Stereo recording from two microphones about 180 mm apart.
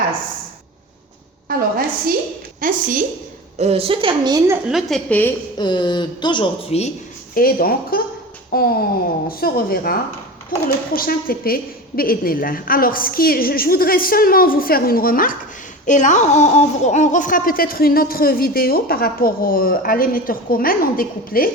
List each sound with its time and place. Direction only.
1.5 s a sound: 55° right (ahead or behind)
2.6 s a woman's voice: 50° right (ahead or behind)
3.6 s a woman's voice: 35° right (ahead or behind); by 4.6 s 15° right (ahead or behind)
4.7 s a woman's voice: centre (ahead or behind)
5.5 s a woman's voice: 25° left (ahead or behind)
7.3 s speech: 55° left (ahead or behind)